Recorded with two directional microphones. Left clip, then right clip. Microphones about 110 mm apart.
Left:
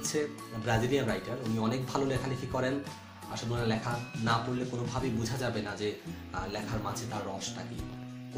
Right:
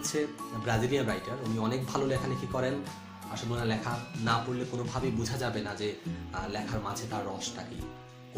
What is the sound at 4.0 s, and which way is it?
Speech, centre (ahead or behind).